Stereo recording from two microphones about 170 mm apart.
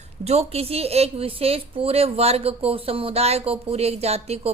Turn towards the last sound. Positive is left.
turn(degrees=-35)  # may be behind; listen again after turning